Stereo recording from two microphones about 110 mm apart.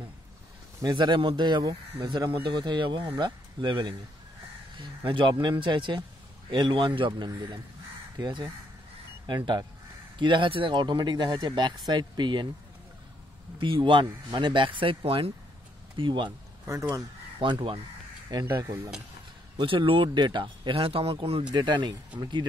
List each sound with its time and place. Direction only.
0.9 s speech: 45° right (ahead or behind)
13.6 s speech: 50° right (ahead or behind)
17.4 s speech: 45° right (ahead or behind)
19.5 s speech: 50° right (ahead or behind)
21.5 s speech: 45° right (ahead or behind)